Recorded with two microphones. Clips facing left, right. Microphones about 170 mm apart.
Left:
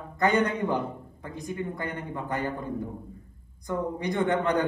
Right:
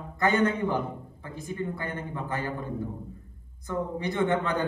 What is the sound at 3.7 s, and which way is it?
Speech, 15° left (ahead or behind).